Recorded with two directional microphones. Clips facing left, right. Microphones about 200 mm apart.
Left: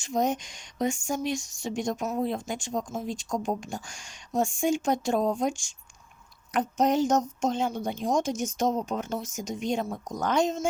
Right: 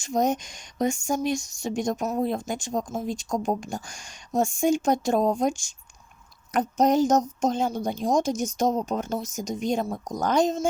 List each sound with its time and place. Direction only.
0.0 s a woman's voice: 45° right (ahead or behind)